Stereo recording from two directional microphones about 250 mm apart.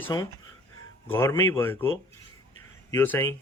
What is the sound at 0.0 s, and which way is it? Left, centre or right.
Speech, centre.